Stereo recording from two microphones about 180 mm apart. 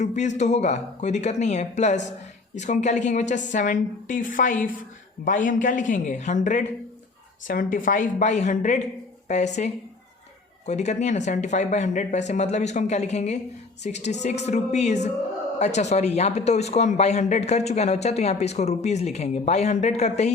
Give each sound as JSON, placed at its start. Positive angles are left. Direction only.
{"t": 0.0, "sound": "a woman's voice", "side_deg": 40}